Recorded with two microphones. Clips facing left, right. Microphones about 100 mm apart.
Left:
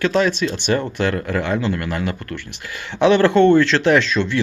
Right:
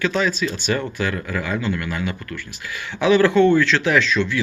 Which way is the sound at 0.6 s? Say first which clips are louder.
Left 3 dB; 45° left (ahead or behind).